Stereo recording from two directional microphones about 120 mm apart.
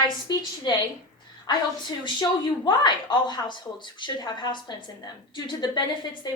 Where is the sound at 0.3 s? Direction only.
35° left (ahead or behind).